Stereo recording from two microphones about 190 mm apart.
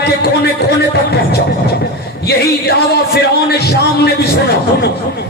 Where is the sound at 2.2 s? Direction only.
60° left (ahead or behind).